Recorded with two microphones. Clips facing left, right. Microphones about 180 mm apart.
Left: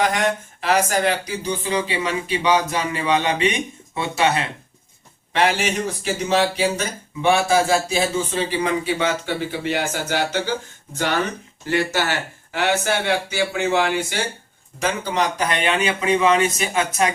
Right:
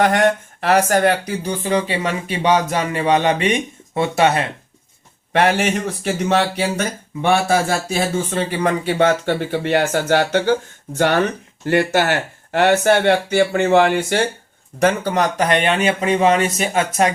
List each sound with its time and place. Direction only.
0.0 s speech: 60° right (ahead or behind); by 17.1 s 40° right (ahead or behind)